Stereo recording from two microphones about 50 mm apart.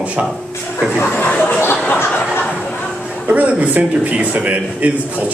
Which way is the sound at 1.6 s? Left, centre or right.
Left.